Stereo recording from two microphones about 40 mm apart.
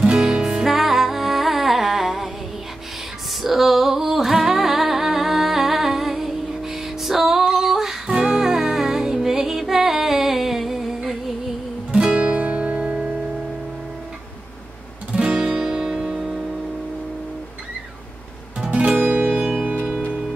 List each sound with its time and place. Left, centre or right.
0.1 s music: centre
3.4 s music: centre
8.1 s music: centre
11.9 s music: right
12.2 s music: right
15.5 s music: centre
18.6 s music: right
18.9 s music: right
19.2 s music: right
20.1 s music: centre